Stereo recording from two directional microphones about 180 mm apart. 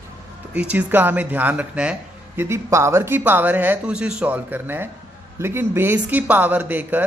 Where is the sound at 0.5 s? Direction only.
5° right (ahead or behind).